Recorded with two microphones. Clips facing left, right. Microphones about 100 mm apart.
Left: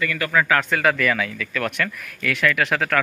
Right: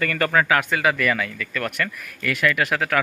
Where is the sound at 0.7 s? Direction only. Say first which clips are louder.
Left 1 dB; 5° right (ahead or behind).